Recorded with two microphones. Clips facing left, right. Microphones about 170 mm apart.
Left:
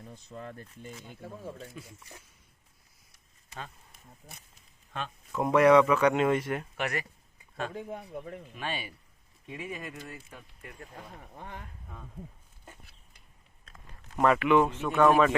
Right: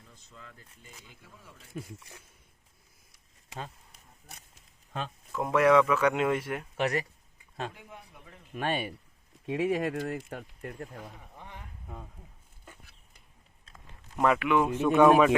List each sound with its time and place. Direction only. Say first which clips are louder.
0.0 s speech: left 10 dB; 55° left (ahead or behind)
1.7 s speech: right 6 dB; 50° right (ahead or behind)
5.4 s speech: left 2 dB; centre (ahead or behind)
6.7 s speech: right 8 dB; 35° right (ahead or behind)
7.8 s a man's voice: left 12 dB; 50° left (ahead or behind)
8.5 s speech: right 7 dB; 55° right (ahead or behind)
9.5 s speech: right 11 dB; 75° right (ahead or behind); by 10.8 s 50° right (ahead or behind)
11.3 s a man's voice: left 6 dB; 50° left (ahead or behind)
14.2 s speech: left 2 dB; 5° right (ahead or behind)